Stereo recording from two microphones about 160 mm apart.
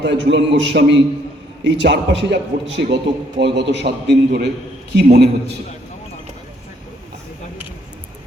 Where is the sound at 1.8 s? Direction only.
90° right.